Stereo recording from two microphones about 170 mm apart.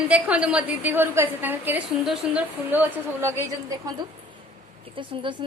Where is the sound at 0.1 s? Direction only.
5° right (ahead or behind).